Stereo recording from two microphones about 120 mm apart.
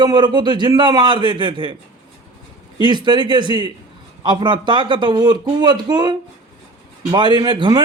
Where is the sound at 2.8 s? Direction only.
40° right (ahead or behind).